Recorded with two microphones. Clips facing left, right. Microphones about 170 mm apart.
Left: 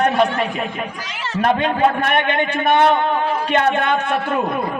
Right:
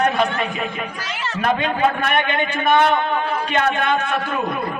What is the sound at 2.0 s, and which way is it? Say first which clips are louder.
Speech: left 2 dB; 25° left (ahead or behind).